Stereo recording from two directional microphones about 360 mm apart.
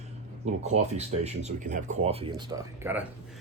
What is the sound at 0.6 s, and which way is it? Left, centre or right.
Speech, centre.